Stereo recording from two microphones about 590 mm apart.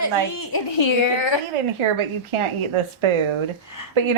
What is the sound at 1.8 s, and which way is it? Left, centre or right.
A woman's voice, right.